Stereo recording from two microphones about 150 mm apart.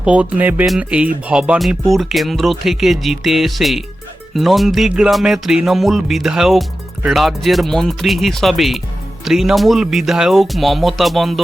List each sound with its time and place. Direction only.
0.0 s speech: 10° right (ahead or behind)